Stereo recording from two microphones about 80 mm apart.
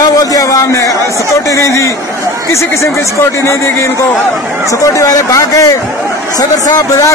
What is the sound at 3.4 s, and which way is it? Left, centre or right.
A man's voice, left.